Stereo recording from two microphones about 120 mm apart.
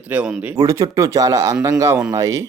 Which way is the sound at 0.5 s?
30° right (ahead or behind).